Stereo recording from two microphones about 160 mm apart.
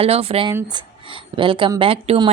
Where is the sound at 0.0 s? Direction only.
35° right (ahead or behind).